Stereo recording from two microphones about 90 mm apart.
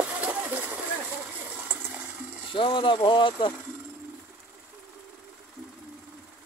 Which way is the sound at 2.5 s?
70° left (ahead or behind).